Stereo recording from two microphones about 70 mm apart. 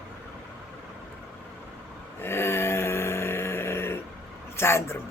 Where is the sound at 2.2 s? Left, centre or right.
Left.